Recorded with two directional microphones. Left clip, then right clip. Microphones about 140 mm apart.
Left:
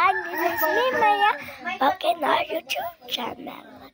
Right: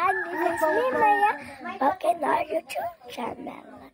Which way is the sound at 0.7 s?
5° right (ahead or behind).